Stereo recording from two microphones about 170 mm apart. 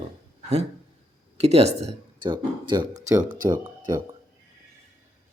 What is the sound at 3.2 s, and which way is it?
Speech, 50° right (ahead or behind).